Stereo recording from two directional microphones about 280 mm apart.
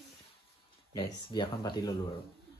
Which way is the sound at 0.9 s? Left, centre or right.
Centre.